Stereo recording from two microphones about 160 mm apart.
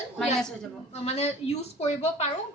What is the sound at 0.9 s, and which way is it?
A woman's voice, 40° left (ahead or behind).